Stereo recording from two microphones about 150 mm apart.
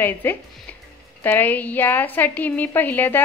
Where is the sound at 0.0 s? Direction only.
15° left (ahead or behind).